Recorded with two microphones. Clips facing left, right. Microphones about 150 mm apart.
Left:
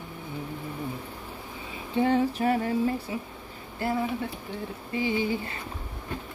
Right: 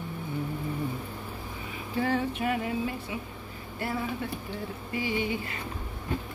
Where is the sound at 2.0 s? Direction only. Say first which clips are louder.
Left 5 dB; 30° left (ahead or behind).